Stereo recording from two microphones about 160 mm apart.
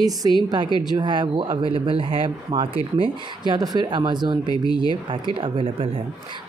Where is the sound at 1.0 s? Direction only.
30° right (ahead or behind).